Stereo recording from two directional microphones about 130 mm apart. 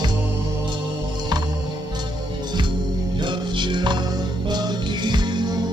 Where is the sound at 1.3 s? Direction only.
35° right (ahead or behind).